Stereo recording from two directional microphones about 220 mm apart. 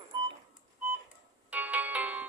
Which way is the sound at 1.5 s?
5° right (ahead or behind).